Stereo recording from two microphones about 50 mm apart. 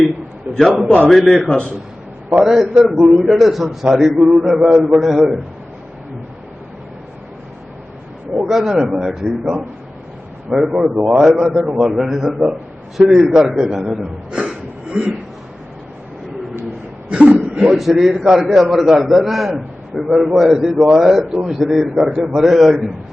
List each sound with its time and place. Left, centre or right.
0.5 s a sound: right
0.9 s a man's voice: centre
1.1 s a man's voice: centre
8.4 s a man's voice: centre
10.5 s a man's voice: centre
11.2 s a man's voice: centre
11.5 s a man's voice: right
11.9 s a man's voice: centre
17.1 s a sound: centre
17.7 s a man's voice: centre